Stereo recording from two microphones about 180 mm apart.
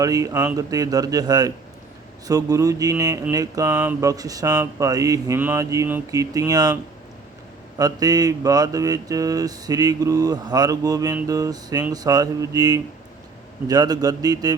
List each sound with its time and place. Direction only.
0.0 s speech: 20° right (ahead or behind)
7.8 s speech: 20° right (ahead or behind)